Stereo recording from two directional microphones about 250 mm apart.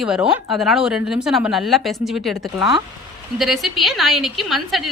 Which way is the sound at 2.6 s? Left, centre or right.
Centre.